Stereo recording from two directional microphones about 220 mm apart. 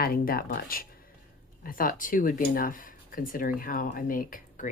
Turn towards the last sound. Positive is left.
turn(degrees=35)  # may be behind; listen again after turning